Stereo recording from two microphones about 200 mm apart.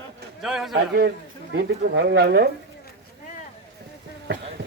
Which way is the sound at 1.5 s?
55° right (ahead or behind).